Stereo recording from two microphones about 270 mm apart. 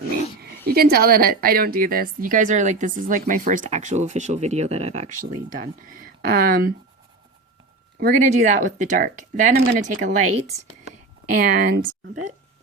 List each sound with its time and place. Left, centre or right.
0.7 s a woman's voice: right
7.9 s a woman's voice: right
11.5 s speech: right